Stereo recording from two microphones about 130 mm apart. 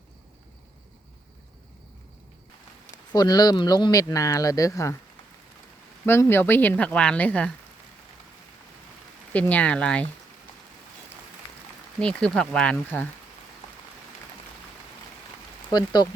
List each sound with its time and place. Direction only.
2.9 s speech: 30° left (ahead or behind)
6.1 s a woman's voice: 20° left (ahead or behind)
9.3 s a woman's voice: 10° left (ahead or behind)
11.9 s a woman's voice: 5° left (ahead or behind)
15.7 s speech: 35° left (ahead or behind)